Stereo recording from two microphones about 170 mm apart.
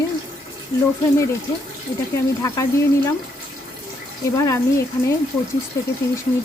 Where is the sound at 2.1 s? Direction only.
20° left (ahead or behind).